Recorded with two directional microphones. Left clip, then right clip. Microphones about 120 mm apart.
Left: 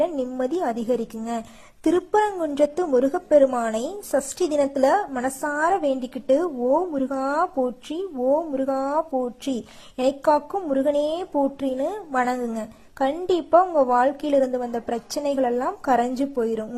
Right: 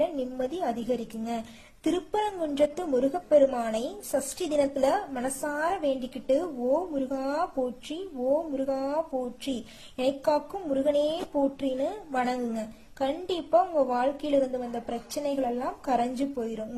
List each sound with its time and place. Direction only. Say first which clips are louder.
0.0 s a woman's voice: left 5 dB; 40° left (ahead or behind)
8.5 s a woman's voice: left 5 dB; 40° left (ahead or behind)
10.6 s a woman's voice: left 4 dB; 30° left (ahead or behind); by 16.6 s 50° left (ahead or behind)